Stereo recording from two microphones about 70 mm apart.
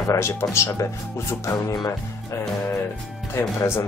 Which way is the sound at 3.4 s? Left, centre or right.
Left.